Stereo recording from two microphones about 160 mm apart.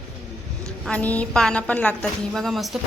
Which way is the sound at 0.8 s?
10° left (ahead or behind).